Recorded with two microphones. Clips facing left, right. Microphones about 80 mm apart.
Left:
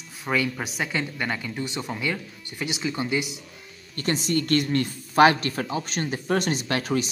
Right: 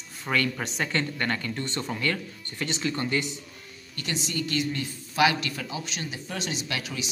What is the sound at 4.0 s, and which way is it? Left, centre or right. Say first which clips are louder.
A woman's voice: left 7 dB; left.